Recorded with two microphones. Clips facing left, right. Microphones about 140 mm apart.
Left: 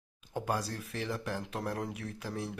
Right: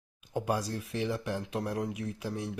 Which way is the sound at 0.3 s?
15° right (ahead or behind).